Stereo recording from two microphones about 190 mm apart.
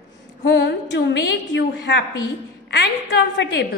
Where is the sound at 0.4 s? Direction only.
65° left (ahead or behind).